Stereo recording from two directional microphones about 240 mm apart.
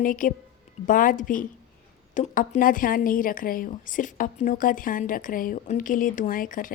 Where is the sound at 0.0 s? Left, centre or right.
Left.